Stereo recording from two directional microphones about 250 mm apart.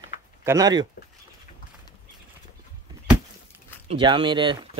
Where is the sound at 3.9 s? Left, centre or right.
Centre.